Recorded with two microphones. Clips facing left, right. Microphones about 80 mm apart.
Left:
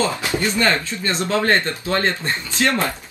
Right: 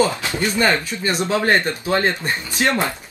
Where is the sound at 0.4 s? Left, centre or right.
Centre.